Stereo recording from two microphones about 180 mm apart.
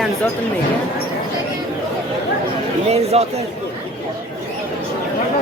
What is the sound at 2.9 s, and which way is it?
Speech, 35° right (ahead or behind).